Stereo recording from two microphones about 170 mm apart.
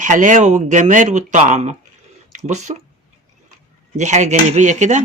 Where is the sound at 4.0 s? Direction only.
45° right (ahead or behind).